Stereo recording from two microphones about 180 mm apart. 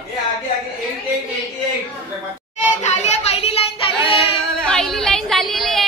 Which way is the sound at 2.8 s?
40° left (ahead or behind).